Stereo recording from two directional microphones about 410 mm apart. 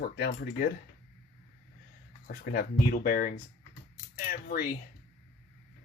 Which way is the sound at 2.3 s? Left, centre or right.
Left.